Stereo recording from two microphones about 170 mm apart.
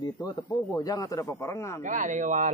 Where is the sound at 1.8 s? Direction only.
50° right (ahead or behind).